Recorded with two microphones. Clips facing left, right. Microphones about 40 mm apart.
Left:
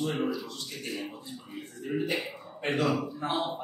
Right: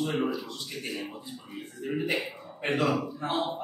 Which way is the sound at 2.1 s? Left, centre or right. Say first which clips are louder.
Right 2 dB; centre.